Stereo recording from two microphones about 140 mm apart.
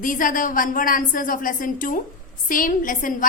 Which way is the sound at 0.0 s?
75° left (ahead or behind).